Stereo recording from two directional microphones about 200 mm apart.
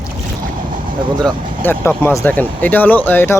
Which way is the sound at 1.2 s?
10° left (ahead or behind).